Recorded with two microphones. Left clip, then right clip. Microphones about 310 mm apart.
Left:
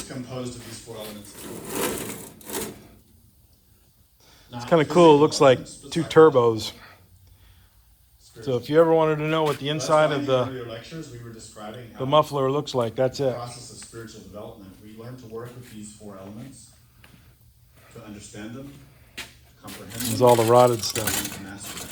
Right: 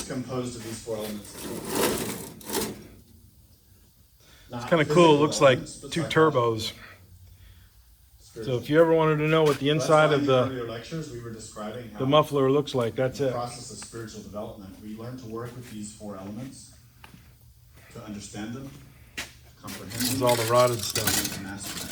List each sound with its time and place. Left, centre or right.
1.4 s wood: centre
4.3 s speech: centre
8.4 s a man's voice: centre
12.0 s speech: centre
16.0 s speech: right
19.9 s speech: centre